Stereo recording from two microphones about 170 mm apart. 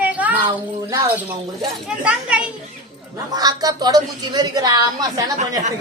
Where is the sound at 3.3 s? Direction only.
20° right (ahead or behind).